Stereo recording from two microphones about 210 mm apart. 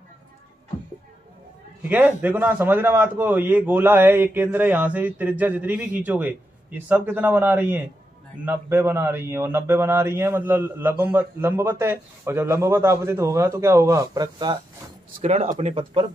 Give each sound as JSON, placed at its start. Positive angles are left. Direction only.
{"t": 1.8, "sound": "a man's voice", "side_deg": -5}
{"t": 15.2, "sound": "speech", "side_deg": -35}